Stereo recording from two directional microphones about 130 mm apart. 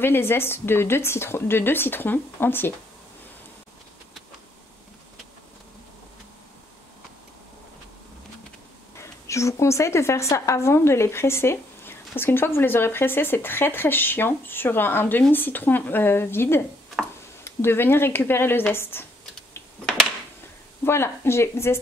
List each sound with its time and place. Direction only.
0.0 s a woman's voice: 15° left (ahead or behind)
8.9 s a woman's voice: 20° left (ahead or behind)
20.8 s speech: 20° left (ahead or behind)